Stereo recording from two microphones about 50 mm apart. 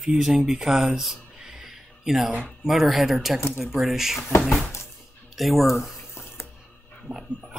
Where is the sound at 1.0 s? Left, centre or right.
Centre.